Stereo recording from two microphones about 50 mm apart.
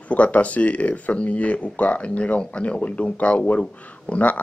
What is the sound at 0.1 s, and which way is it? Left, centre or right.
Speech, left.